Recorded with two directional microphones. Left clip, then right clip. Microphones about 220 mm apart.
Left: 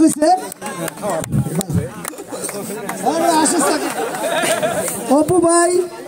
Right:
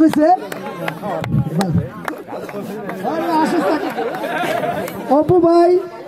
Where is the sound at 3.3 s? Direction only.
35° left (ahead or behind).